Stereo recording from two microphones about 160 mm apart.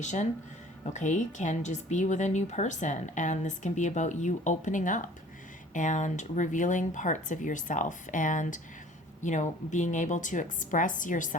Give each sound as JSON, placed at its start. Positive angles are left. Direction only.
{"t": 0.0, "sound": "speech", "side_deg": 45}